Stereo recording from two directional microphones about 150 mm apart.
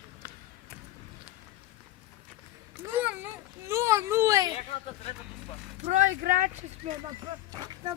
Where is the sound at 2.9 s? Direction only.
10° right (ahead or behind).